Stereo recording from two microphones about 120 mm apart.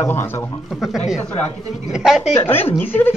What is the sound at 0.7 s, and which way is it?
Speech, centre (ahead or behind).